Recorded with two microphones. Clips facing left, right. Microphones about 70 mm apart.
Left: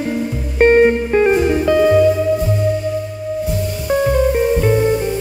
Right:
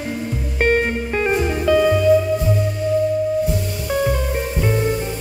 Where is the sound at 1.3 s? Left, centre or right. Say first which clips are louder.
Left 4 dB; centre.